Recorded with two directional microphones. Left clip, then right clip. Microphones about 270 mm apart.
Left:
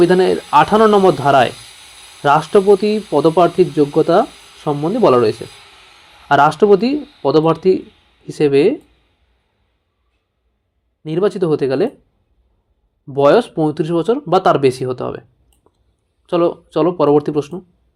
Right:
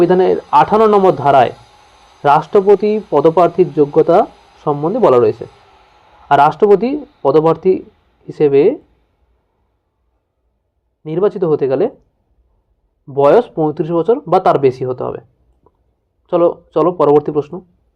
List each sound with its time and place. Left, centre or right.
0.0 s speech: left
11.0 s speech: left
13.1 s speech: left
15.6 s a sound: left
16.2 s speech: left